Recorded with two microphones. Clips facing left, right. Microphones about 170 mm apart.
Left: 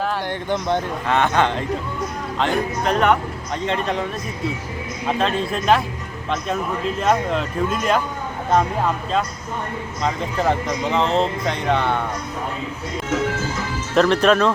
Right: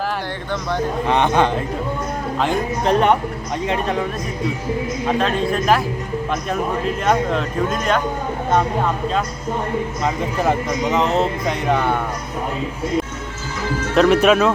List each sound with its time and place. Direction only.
1.0 s speech: 15° right (ahead or behind)
2.8 s speech: 30° right (ahead or behind)
3.7 s speech: centre (ahead or behind)
5.2 s speech: centre (ahead or behind)
7.0 s speech: centre (ahead or behind)
10.4 s speech: 5° right (ahead or behind)
13.9 s speech: 5° right (ahead or behind)